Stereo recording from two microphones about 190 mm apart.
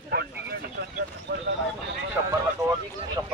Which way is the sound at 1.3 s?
60° right (ahead or behind).